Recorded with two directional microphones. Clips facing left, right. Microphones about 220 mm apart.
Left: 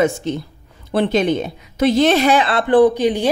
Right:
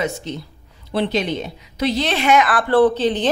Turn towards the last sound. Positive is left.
turn(degrees=10)  # may be behind; listen again after turning